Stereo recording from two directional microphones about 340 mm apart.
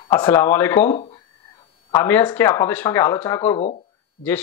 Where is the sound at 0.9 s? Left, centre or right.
Centre.